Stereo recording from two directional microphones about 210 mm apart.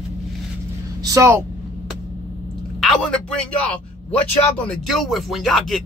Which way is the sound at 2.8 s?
5° left (ahead or behind).